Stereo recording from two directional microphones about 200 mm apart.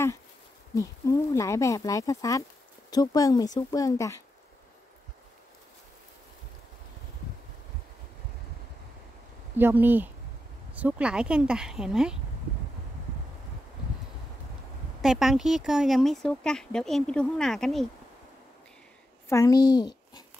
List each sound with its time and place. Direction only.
0.7 s speech: 15° left (ahead or behind)
9.6 s speech: 10° right (ahead or behind)
15.0 s speech: centre (ahead or behind)
19.2 s speech: 15° left (ahead or behind)